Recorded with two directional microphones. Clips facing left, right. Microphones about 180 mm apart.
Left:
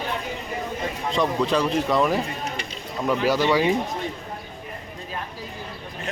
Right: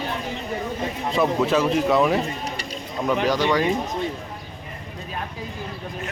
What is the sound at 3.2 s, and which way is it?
Speech, 10° left (ahead or behind).